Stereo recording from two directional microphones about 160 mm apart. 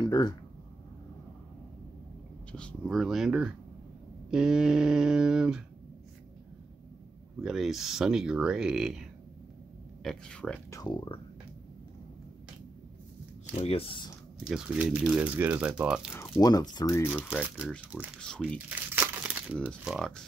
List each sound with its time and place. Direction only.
0.0 s speech: 25° left (ahead or behind)
2.5 s speech: 5° left (ahead or behind)
7.4 s speech: centre (ahead or behind)
10.0 s speech: 5° left (ahead or behind)
10.7 s speech: 25° left (ahead or behind)
13.5 s speech: 45° left (ahead or behind)
14.4 s speech: 5° right (ahead or behind)
16.3 s speech: 25° left (ahead or behind)
17.4 s speech: 5° right (ahead or behind)
18.7 s crumpling: 10° right (ahead or behind)
19.8 s speech: centre (ahead or behind)